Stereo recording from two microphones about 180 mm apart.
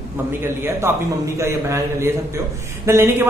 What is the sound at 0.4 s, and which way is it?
A woman's voice, 15° right (ahead or behind).